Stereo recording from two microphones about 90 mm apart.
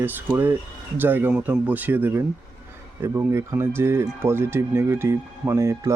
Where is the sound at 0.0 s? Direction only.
20° right (ahead or behind).